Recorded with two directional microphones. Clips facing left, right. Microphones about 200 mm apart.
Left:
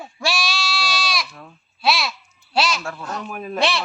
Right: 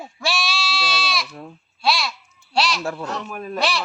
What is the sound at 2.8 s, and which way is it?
Speech, 30° right (ahead or behind).